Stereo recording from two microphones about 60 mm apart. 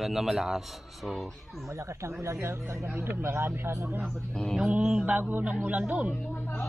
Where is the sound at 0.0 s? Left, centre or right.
Centre.